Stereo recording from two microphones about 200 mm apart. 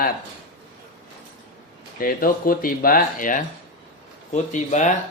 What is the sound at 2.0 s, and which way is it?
Speech, 45° left (ahead or behind).